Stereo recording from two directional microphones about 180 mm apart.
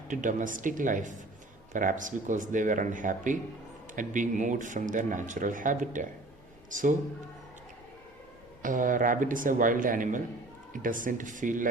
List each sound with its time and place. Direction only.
0.1 s speech: 45° right (ahead or behind)
8.6 s speech: 45° right (ahead or behind)